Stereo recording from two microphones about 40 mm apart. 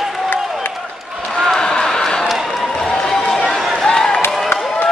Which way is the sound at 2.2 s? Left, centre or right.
Centre.